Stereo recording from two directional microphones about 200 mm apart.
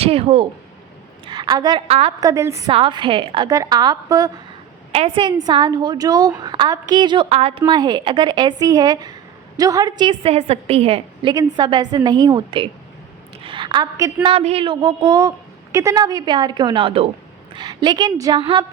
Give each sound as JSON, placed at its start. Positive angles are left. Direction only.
{"t": 0.0, "sound": "a woman's voice", "side_deg": -30}
{"t": 2.2, "sound": "a woman's voice", "side_deg": -15}
{"t": 4.9, "sound": "a woman's voice", "side_deg": -30}